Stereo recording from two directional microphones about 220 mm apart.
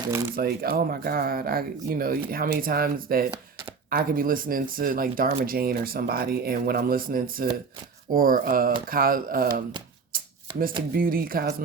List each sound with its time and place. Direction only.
0.3 s speech: 45° right (ahead or behind)
10.9 s speech: 40° right (ahead or behind)